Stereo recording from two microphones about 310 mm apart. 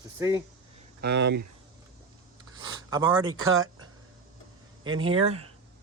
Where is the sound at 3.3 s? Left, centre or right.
Right.